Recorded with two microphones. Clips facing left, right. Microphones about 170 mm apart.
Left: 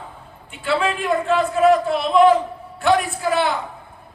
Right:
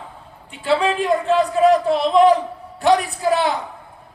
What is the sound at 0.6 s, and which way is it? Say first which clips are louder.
Speech: right 3 dB; 35° right (ahead or behind).